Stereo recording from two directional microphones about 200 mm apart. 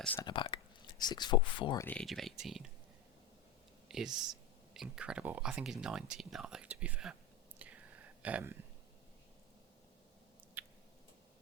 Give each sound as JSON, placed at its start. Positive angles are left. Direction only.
{"t": 0.2, "sound": "whispering", "side_deg": 25}
{"t": 1.0, "sound": "speech", "side_deg": 20}
{"t": 1.8, "sound": "speech", "side_deg": 5}
{"t": 3.8, "sound": "a sound", "side_deg": 0}
{"t": 4.7, "sound": "speech", "side_deg": -5}
{"t": 7.6, "sound": "whispering", "side_deg": -5}
{"t": 8.2, "sound": "speech", "side_deg": -5}
{"t": 10.6, "sound": "squish", "side_deg": -10}